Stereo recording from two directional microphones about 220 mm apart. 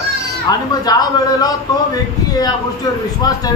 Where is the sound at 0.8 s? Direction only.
15° left (ahead or behind).